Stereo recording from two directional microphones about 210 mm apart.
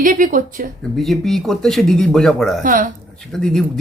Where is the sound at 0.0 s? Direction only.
40° right (ahead or behind).